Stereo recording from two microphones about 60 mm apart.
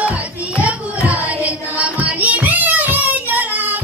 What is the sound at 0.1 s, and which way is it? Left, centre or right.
Music, right.